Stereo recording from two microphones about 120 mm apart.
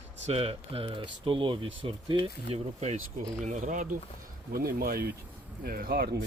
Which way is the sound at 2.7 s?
70° right (ahead or behind).